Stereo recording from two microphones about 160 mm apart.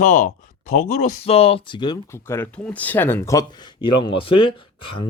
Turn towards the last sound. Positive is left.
turn(degrees=35)  # may be behind; listen again after turning